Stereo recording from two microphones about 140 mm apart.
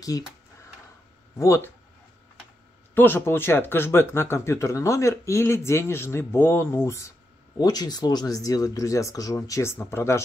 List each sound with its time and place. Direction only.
0.1 s speech: 25° left (ahead or behind)
1.4 s speech: 20° left (ahead or behind)
2.9 s speech: 15° left (ahead or behind)